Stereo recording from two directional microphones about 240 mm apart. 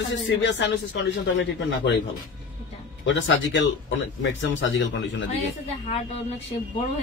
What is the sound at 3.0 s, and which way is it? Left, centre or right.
Speech, left.